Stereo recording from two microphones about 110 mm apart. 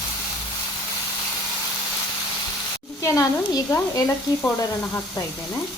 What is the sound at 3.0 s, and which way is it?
Speech, 30° left (ahead or behind).